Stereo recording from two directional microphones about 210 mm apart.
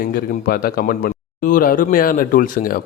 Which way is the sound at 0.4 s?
45° left (ahead or behind).